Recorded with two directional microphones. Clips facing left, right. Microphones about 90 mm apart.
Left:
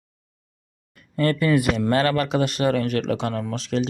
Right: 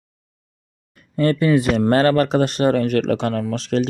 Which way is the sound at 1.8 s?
40° right (ahead or behind).